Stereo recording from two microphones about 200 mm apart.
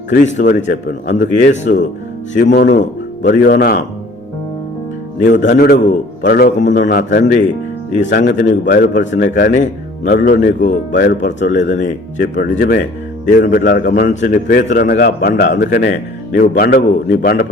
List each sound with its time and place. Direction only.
0.1 s speech: 40° left (ahead or behind)
0.7 s a man's voice: 55° left (ahead or behind)
2.3 s a man's voice: 60° left (ahead or behind)
5.5 s a man's voice: 55° left (ahead or behind)
11.7 s speech: 40° left (ahead or behind)
12.2 s a man's voice: 50° left (ahead or behind)